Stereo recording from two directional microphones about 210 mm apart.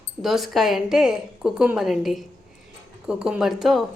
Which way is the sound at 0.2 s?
Centre (ahead or behind).